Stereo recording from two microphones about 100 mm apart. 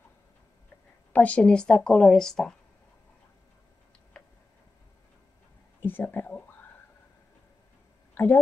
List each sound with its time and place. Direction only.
1.1 s speech: 15° left (ahead or behind)
4.1 s tick-tock: 10° left (ahead or behind)
5.8 s speech: 20° left (ahead or behind)
8.1 s a sound: 20° left (ahead or behind)